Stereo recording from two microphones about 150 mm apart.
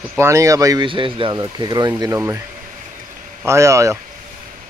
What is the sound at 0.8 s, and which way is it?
Speech, 35° right (ahead or behind).